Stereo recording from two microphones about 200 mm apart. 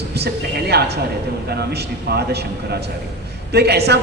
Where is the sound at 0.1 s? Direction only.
55° right (ahead or behind).